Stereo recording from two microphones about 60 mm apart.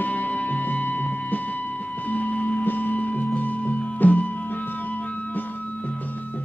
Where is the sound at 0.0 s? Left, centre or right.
Left.